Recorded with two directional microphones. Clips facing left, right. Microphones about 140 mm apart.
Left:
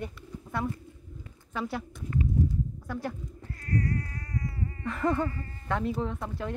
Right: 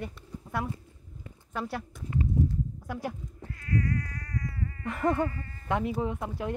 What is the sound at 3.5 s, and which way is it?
Cat, 40° left (ahead or behind).